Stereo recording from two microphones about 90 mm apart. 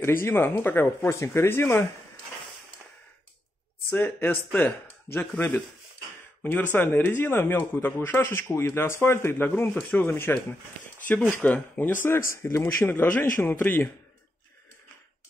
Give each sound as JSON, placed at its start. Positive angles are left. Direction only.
{"t": 0.0, "sound": "speech", "side_deg": 25}
{"t": 4.0, "sound": "speech", "side_deg": 25}
{"t": 6.4, "sound": "speech", "side_deg": 20}
{"t": 11.4, "sound": "speech", "side_deg": 15}